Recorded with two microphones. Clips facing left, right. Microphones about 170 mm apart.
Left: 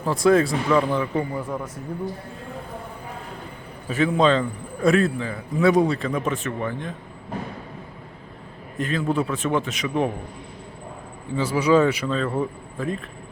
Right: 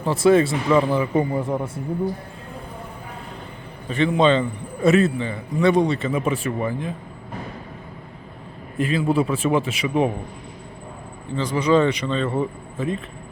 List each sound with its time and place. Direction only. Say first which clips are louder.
0.0 s a man's voice: right 2 dB; centre (ahead or behind)
1.1 s a man's voice: right 5 dB; 25° right (ahead or behind)
3.8 s a man's voice: right 1 dB; 5° left (ahead or behind)
8.8 s a man's voice: right 3 dB; 5° right (ahead or behind)
11.3 s a man's voice: even; 10° left (ahead or behind)